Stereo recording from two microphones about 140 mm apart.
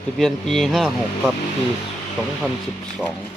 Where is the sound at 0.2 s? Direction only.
Centre (ahead or behind).